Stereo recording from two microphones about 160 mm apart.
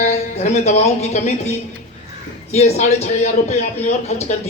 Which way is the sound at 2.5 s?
45° left (ahead or behind).